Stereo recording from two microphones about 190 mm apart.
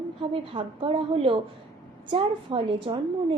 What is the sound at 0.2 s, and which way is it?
A woman's voice, 30° right (ahead or behind).